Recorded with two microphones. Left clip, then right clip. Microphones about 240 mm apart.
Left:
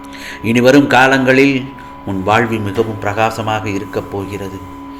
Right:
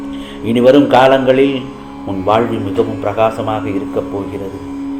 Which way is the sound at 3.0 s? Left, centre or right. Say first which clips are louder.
Right 1 dB; left.